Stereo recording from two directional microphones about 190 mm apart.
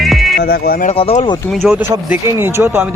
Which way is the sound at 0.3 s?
55° left (ahead or behind).